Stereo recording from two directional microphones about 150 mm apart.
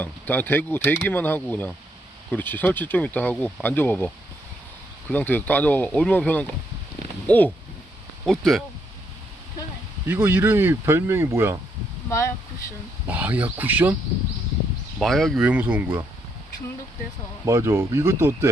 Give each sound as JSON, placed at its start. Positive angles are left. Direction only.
{"t": 0.0, "sound": "speech", "side_deg": 10}
{"t": 8.2, "sound": "speech", "side_deg": 0}
{"t": 10.1, "sound": "speech", "side_deg": -15}
{"t": 13.1, "sound": "speech", "side_deg": -10}
{"t": 14.9, "sound": "speech", "side_deg": 0}
{"t": 15.4, "sound": "speech", "side_deg": -10}
{"t": 17.4, "sound": "speech", "side_deg": -20}